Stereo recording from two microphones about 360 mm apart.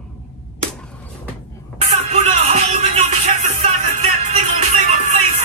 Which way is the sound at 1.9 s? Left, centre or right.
Centre.